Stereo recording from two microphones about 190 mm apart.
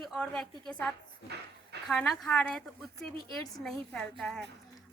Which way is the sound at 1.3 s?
60° right (ahead or behind).